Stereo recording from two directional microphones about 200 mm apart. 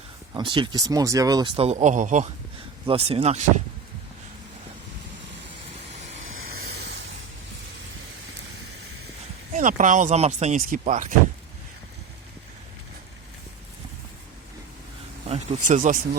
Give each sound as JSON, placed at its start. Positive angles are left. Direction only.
{"t": 0.3, "sound": "speech", "side_deg": -25}
{"t": 6.2, "sound": "vehicle", "side_deg": -90}
{"t": 6.7, "sound": "a sound", "side_deg": -55}
{"t": 9.6, "sound": "speech", "side_deg": -40}
{"t": 15.3, "sound": "bee", "side_deg": -35}